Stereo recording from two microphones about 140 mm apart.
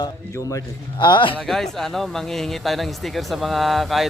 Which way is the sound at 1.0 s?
35° left (ahead or behind).